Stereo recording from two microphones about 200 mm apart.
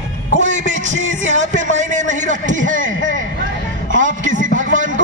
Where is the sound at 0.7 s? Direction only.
40° right (ahead or behind).